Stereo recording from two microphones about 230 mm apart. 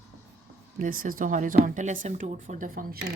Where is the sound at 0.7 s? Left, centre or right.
Right.